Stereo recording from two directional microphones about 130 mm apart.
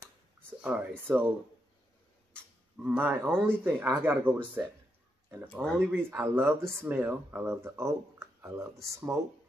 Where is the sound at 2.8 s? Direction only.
10° right (ahead or behind).